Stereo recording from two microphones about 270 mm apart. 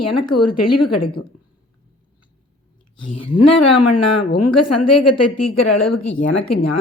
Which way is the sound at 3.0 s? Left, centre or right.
Left.